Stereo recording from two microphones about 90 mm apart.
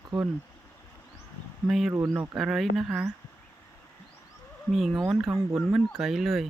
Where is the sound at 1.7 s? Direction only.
5° right (ahead or behind).